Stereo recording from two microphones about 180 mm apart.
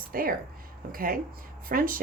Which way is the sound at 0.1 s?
55° right (ahead or behind).